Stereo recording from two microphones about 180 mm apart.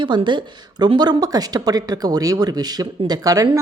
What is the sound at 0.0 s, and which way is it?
Speech, 25° right (ahead or behind).